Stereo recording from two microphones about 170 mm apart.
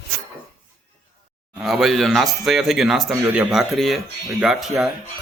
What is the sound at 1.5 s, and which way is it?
A man's voice, centre (ahead or behind).